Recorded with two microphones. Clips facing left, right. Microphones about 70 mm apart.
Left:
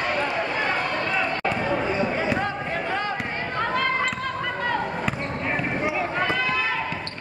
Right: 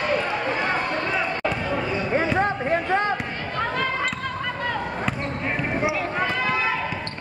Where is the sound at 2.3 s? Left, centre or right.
Right.